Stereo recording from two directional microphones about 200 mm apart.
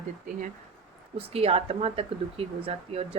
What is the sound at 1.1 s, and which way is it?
Speech, 30° right (ahead or behind).